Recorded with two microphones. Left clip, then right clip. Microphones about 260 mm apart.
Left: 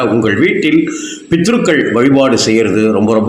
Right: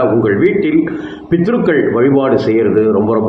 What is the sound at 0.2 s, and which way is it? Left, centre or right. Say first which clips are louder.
A man's voice: even; left.